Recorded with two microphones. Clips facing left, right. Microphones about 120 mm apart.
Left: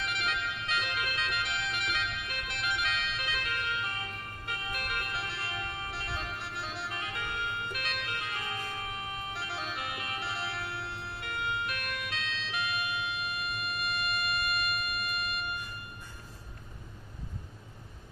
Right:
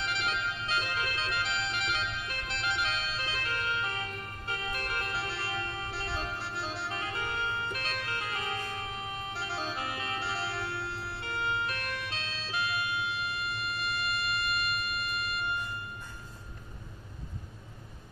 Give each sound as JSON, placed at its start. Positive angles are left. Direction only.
{"t": 0.0, "sound": "music", "side_deg": -30}